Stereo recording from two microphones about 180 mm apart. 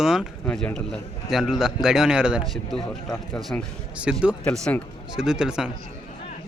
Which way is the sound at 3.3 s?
5° left (ahead or behind).